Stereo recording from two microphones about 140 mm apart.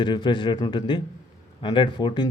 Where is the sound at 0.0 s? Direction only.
35° left (ahead or behind).